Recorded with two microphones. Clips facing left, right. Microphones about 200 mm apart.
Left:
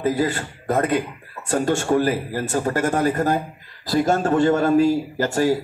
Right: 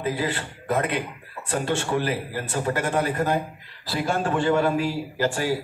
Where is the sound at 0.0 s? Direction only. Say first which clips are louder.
Left 5 dB; 40° left (ahead or behind).